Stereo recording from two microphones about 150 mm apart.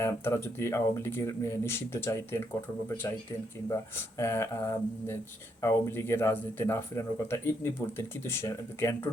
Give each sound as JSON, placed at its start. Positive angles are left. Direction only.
{"t": 0.0, "sound": "speech", "side_deg": 15}